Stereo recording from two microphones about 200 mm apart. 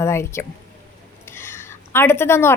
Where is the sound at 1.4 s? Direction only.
10° left (ahead or behind).